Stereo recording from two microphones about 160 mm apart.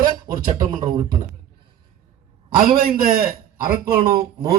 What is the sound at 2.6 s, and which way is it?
A man's voice, 65° right (ahead or behind).